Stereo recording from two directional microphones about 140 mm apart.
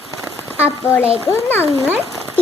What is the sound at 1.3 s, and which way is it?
Speech, 15° left (ahead or behind).